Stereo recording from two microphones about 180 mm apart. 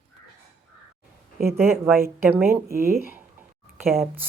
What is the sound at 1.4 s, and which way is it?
Speech, 15° right (ahead or behind).